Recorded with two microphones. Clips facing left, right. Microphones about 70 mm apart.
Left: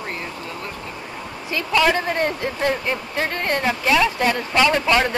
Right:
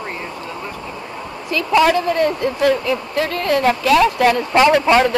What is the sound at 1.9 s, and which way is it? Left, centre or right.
Speech, right.